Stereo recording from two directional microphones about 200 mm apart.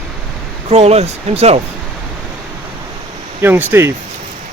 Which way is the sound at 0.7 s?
30° right (ahead or behind).